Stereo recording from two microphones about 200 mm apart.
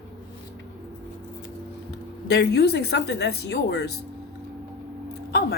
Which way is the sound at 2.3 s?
55° left (ahead or behind).